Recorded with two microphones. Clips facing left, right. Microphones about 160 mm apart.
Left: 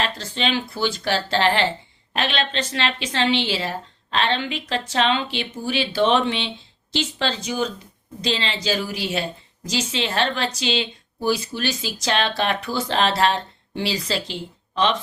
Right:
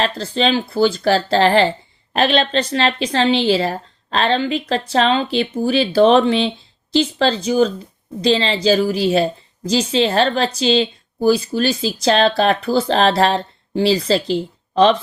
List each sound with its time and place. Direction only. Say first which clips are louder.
0.2 s a woman's voice: right 6 dB; 35° right (ahead or behind)